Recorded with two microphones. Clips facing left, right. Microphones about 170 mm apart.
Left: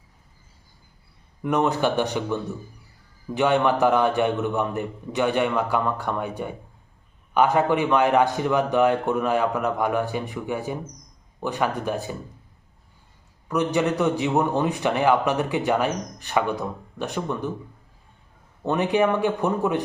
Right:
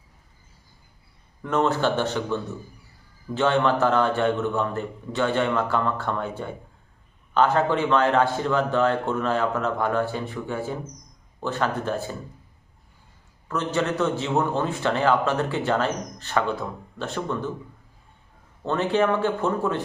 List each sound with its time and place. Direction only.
1.4 s a man's voice: 15° left (ahead or behind)
13.5 s a man's voice: 15° left (ahead or behind)
18.6 s a man's voice: 15° left (ahead or behind)